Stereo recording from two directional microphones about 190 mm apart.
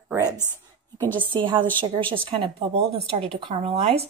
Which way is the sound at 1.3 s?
25° right (ahead or behind).